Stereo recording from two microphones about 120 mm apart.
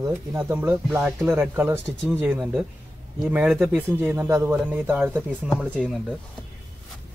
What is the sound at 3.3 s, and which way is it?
Speech, 10° right (ahead or behind).